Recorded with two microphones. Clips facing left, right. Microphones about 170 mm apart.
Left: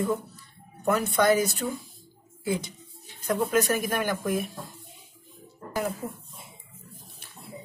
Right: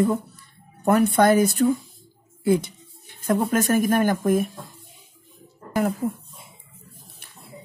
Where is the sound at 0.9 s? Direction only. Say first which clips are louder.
Right 5 dB; 55° right (ahead or behind).